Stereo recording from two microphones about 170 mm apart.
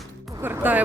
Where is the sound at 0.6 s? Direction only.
10° right (ahead or behind).